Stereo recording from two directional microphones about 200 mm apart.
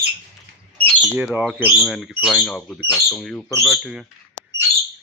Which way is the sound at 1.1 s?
5° right (ahead or behind).